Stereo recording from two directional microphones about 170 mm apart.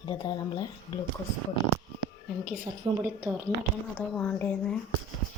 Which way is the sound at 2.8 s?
25° right (ahead or behind).